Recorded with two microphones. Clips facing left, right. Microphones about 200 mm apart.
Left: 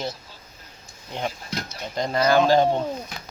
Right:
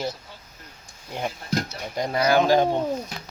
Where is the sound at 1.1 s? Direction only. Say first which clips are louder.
Right 2 dB; 10° right (ahead or behind).